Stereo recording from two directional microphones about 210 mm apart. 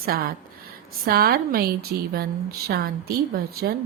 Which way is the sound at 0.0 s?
45° right (ahead or behind).